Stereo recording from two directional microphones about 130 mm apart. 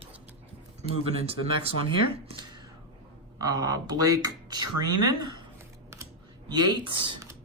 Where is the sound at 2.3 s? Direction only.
35° right (ahead or behind).